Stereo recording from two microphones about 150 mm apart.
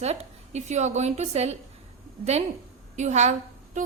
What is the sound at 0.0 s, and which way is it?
A woman's voice, 45° right (ahead or behind).